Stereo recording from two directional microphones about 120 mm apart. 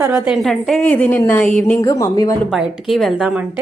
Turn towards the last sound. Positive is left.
turn(degrees=0)  # may be behind; listen again after turning